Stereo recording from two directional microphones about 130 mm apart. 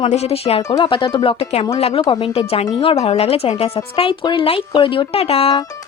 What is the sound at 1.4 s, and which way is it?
Speech, 55° left (ahead or behind).